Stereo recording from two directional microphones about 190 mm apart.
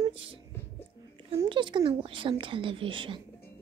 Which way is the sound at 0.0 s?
30° right (ahead or behind).